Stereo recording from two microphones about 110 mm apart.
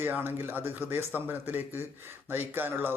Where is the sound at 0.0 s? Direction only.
20° right (ahead or behind).